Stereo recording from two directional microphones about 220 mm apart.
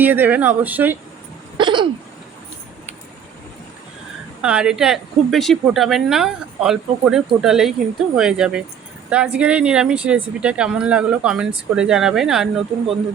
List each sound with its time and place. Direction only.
0.0 s speech: 10° right (ahead or behind)
1.5 s throat clearing: 20° right (ahead or behind)
4.4 s a woman's voice: 5° right (ahead or behind)